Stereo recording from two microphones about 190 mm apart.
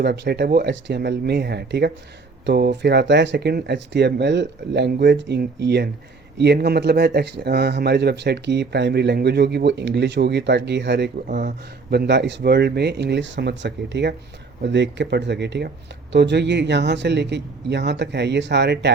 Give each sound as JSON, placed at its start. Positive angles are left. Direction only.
{"t": 0.0, "sound": "speech", "side_deg": -60}